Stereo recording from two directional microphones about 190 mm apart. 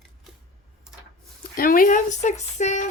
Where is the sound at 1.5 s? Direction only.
50° left (ahead or behind).